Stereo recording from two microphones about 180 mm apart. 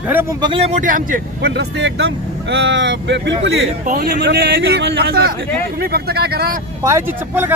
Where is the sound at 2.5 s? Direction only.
90° right.